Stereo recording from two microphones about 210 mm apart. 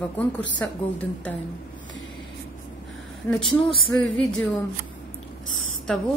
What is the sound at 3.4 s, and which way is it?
Speech, 20° left (ahead or behind).